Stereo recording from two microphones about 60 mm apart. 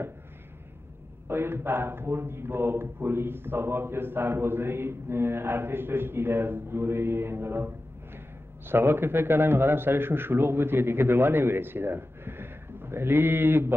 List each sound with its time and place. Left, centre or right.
1.2 s a man's voice: right